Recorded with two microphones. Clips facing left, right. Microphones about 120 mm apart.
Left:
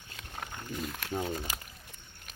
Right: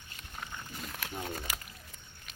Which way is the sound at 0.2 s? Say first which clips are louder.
Left 2 dB; 80° left.